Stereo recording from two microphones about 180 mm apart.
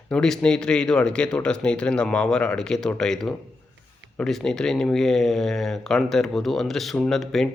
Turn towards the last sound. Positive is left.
turn(degrees=0)  # may be behind; listen again after turning